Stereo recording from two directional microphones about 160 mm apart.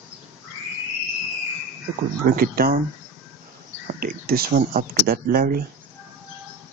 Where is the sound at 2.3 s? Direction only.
70° right (ahead or behind).